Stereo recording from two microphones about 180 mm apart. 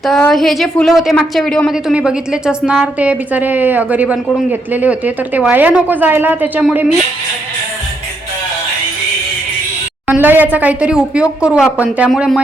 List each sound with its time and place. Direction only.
0.0 s a woman's voice: centre (ahead or behind)
10.1 s speech: 10° right (ahead or behind)